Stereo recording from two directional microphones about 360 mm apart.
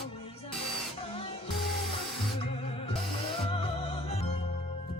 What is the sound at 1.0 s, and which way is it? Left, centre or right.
Music, centre.